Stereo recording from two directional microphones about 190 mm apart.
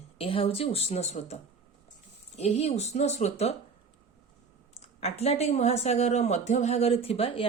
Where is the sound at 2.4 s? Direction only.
35° left (ahead or behind).